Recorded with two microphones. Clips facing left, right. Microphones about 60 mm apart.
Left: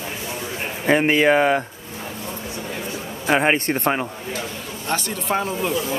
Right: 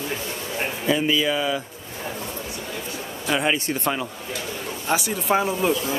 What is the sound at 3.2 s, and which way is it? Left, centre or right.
Speech, left.